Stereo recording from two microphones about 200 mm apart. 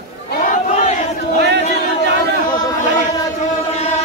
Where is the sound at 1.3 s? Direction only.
55° right (ahead or behind).